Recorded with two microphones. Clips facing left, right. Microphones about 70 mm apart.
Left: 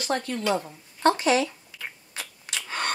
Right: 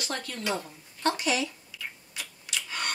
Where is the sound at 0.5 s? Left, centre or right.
Left.